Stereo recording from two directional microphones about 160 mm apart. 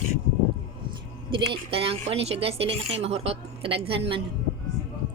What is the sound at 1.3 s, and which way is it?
A woman's voice, 35° right (ahead or behind).